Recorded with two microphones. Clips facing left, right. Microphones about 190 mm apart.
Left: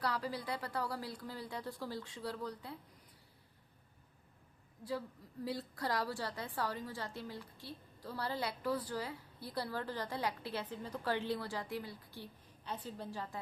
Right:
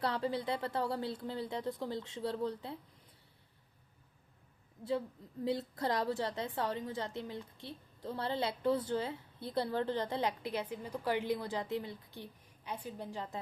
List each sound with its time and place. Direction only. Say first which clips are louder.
0.0 s a woman's voice: right 4 dB; 25° right (ahead or behind)
4.8 s a woman's voice: right 5 dB; 25° right (ahead or behind)